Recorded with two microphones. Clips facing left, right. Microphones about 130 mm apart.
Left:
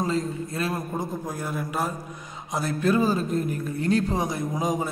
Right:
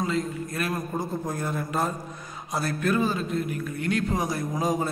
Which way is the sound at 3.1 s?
40° left (ahead or behind).